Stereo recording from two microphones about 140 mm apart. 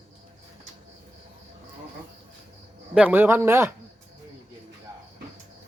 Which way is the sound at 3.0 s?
15° right (ahead or behind).